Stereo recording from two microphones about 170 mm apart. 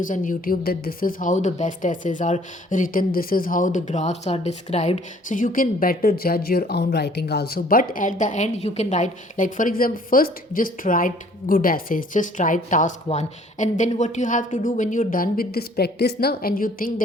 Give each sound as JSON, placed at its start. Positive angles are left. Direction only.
{"t": 0.0, "sound": "a woman's voice", "side_deg": 50}